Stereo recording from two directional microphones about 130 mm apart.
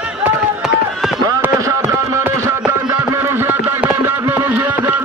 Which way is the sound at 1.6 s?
25° right (ahead or behind).